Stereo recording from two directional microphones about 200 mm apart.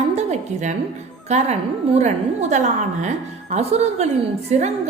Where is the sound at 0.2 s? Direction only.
35° right (ahead or behind).